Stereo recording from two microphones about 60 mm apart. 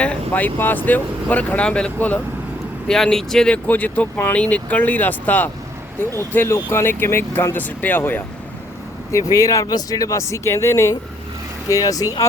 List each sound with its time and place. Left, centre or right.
0.0 s speech: left
2.8 s speech: centre
3.5 s speech: left
6.5 s speech: left
7.5 s speech: left
9.1 s speech: left
11.7 s speech: left